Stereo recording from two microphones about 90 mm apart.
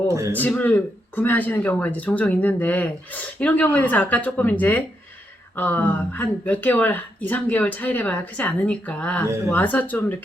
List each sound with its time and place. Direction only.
0.1 s a man's voice: 35° right (ahead or behind)
0.3 s speech: 20° left (ahead or behind)